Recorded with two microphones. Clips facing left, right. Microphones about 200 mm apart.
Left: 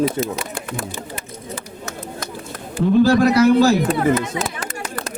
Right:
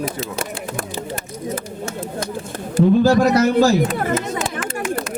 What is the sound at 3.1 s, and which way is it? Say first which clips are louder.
Speech: left 1 dB; 60° left (ahead or behind).